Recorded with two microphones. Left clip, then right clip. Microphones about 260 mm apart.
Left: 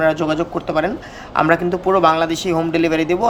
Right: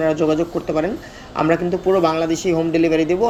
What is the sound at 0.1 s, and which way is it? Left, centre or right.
Speech, centre.